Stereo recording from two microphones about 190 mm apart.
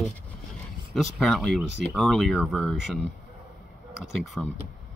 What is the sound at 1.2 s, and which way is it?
Speech, centre (ahead or behind).